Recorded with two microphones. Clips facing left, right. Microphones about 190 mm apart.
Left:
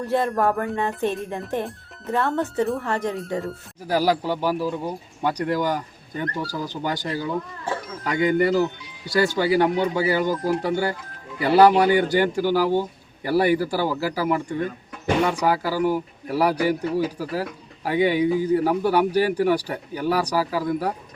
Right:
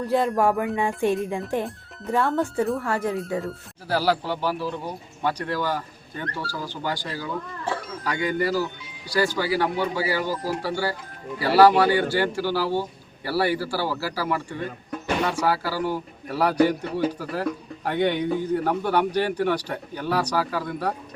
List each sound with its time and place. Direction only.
0.0 s speech: centre (ahead or behind)
1.0 s speech: 10° right (ahead or behind)
1.6 s speech: centre (ahead or behind)
3.8 s speech: 15° left (ahead or behind)